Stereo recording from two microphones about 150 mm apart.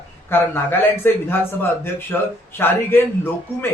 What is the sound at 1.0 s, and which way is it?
Speech, 15° left (ahead or behind).